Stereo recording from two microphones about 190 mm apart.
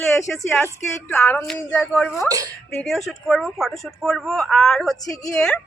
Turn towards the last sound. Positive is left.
turn(degrees=5)  # may be behind; listen again after turning